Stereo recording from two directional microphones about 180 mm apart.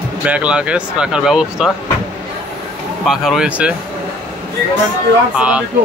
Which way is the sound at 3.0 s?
Centre (ahead or behind).